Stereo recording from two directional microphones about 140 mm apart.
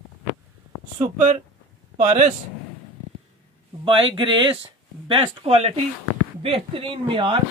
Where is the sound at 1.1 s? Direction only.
60° right (ahead or behind).